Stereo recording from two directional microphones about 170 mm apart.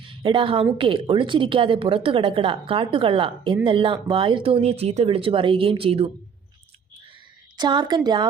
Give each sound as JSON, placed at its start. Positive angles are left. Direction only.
{"t": 0.0, "sound": "a sound", "side_deg": -30}
{"t": 0.8, "sound": "a woman's voice", "side_deg": -30}
{"t": 7.5, "sound": "a woman's voice", "side_deg": -25}